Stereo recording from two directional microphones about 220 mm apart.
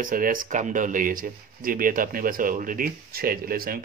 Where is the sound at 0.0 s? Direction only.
40° right (ahead or behind).